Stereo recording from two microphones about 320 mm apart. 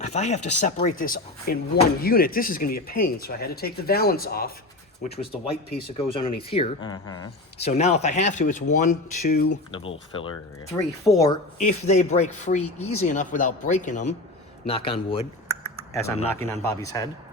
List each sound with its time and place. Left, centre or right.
0.0 s speech: centre
6.1 s speech: centre